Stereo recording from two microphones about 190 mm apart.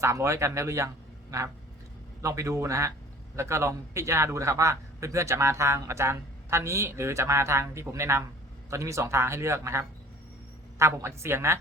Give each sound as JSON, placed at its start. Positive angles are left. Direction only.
{"t": 0.0, "sound": "a man's voice", "side_deg": -15}
{"t": 2.2, "sound": "a man's voice", "side_deg": -15}